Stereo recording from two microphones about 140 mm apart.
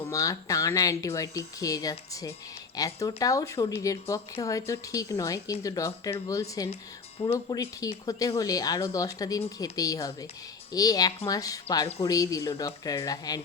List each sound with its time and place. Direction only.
0.1 s speech: 25° left (ahead or behind)